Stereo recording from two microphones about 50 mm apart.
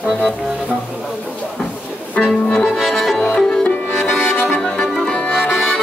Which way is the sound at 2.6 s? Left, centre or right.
Centre.